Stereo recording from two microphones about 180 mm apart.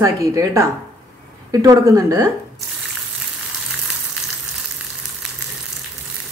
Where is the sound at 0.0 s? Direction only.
15° right (ahead or behind).